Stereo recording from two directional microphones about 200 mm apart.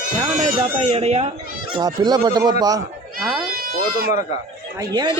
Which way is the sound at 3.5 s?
45° right (ahead or behind).